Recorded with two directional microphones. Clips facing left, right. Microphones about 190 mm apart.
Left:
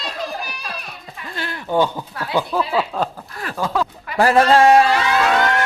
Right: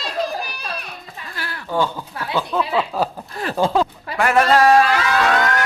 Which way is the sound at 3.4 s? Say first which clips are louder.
Right 4 dB; 30° right (ahead or behind).